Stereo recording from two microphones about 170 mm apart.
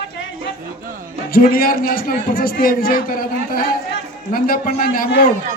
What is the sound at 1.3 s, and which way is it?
A man's voice, 60° left (ahead or behind).